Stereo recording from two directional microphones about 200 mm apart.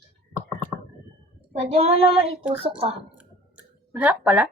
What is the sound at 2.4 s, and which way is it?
Speech, 5° right (ahead or behind).